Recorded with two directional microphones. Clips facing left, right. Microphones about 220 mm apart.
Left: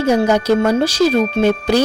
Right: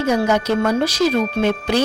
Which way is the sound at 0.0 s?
30° left (ahead or behind).